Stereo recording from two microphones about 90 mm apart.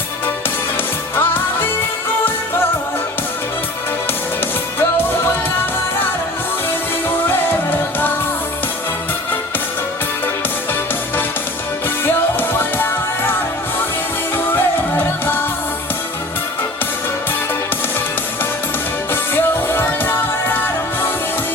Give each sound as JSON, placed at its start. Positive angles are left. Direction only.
{"t": 1.1, "sound": "music", "side_deg": 20}
{"t": 7.3, "sound": "music", "side_deg": 20}
{"t": 12.0, "sound": "music", "side_deg": 25}
{"t": 14.3, "sound": "music", "side_deg": 25}
{"t": 19.1, "sound": "music", "side_deg": 25}